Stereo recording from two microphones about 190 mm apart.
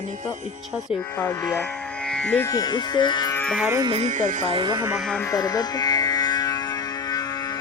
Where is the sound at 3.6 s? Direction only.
15° right (ahead or behind).